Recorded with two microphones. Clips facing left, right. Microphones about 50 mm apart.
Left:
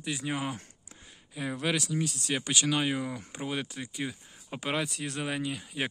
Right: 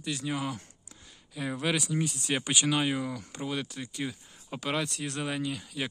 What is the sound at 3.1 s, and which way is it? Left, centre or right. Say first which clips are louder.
Speech: even; left.